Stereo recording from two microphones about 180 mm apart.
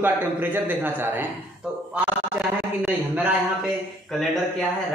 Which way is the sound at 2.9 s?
10° right (ahead or behind).